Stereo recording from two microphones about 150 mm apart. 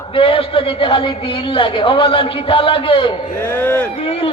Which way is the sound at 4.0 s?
40° left (ahead or behind).